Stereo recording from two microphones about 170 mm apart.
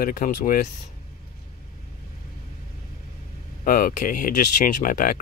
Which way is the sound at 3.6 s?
55° left (ahead or behind).